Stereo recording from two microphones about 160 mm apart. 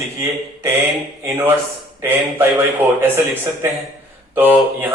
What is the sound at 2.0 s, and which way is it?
A man's voice, 15° right (ahead or behind).